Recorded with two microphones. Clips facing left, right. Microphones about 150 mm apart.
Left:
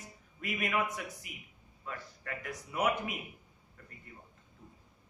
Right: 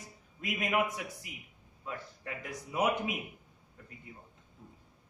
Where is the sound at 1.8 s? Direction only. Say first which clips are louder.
Right 2 dB; 20° right (ahead or behind).